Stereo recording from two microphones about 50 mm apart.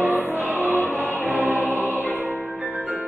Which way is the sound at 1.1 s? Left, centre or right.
Right.